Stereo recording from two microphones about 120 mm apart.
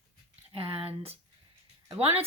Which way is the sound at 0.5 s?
50° right (ahead or behind).